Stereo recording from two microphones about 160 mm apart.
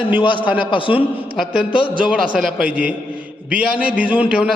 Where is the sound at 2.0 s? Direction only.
5° right (ahead or behind).